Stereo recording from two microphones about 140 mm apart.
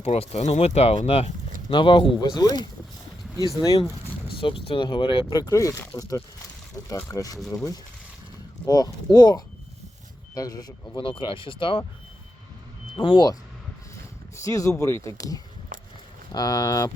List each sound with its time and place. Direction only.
0.0 s speech: 50° left (ahead or behind); by 3.8 s 25° left (ahead or behind)
4.4 s speech: 40° left (ahead or behind)
13.0 s speech: 35° left (ahead or behind)
13.9 s speech: 20° left (ahead or behind)
15.7 s a sound: 75° right (ahead or behind)
16.3 s speech: 25° left (ahead or behind)